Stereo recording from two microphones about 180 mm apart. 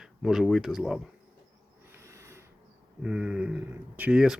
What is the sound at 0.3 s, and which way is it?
Speech, centre (ahead or behind).